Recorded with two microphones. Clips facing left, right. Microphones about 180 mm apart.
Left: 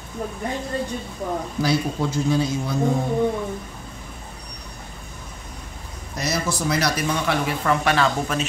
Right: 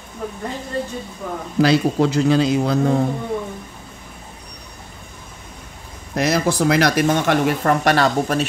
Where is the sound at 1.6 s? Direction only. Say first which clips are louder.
Right 8 dB; 80° right.